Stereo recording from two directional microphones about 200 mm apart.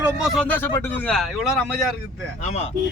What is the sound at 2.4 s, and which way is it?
Speech, 35° left (ahead or behind).